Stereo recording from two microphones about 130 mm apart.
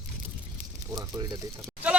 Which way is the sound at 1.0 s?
30° right (ahead or behind).